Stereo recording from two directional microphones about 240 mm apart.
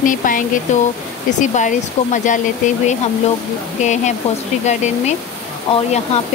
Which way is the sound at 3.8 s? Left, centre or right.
Left.